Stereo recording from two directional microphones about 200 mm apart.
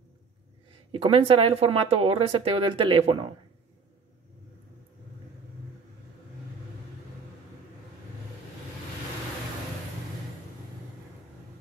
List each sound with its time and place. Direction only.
0.9 s speech: 25° right (ahead or behind)